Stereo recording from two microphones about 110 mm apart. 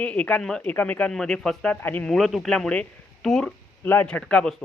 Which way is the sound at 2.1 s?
Centre (ahead or behind).